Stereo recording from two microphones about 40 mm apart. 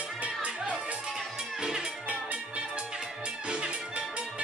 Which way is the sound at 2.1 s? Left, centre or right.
Right.